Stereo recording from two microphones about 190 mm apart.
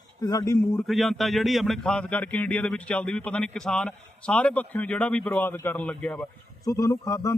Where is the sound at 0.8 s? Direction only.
Centre (ahead or behind).